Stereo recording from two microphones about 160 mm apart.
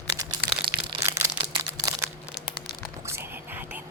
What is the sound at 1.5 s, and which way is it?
Crumpling, 20° right (ahead or behind).